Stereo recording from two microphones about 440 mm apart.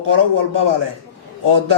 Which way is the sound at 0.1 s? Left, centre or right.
Right.